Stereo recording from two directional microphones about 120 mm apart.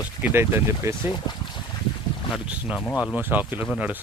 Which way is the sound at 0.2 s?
20° right (ahead or behind).